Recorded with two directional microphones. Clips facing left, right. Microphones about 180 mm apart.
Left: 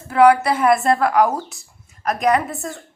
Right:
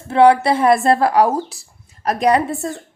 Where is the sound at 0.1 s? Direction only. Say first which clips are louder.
Right 2 dB; 25° right (ahead or behind).